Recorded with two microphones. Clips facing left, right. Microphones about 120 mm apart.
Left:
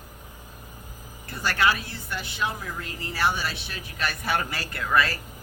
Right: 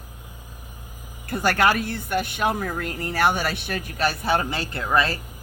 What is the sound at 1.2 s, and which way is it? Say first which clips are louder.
A woman's voice: right 4 dB; 50° right (ahead or behind).